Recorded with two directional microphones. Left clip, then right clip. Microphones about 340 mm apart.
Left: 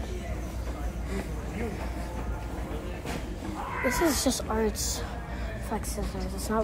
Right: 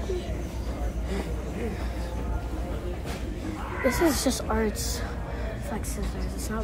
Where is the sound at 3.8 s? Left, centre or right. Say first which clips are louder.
Right 2 dB; centre.